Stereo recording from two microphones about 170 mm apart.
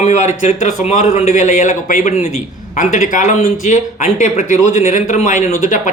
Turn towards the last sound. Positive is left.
turn(degrees=45)  # may be behind; listen again after turning